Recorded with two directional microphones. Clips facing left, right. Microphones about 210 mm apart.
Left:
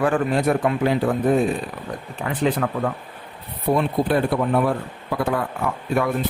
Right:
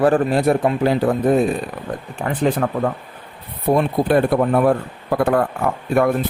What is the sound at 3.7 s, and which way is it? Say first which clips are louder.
Speech: right 4 dB; 50° right (ahead or behind).